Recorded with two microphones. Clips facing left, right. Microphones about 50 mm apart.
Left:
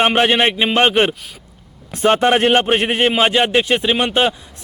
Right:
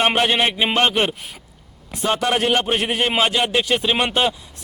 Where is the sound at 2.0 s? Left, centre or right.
Left.